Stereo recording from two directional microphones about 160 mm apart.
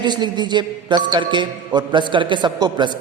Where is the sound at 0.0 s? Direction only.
25° right (ahead or behind).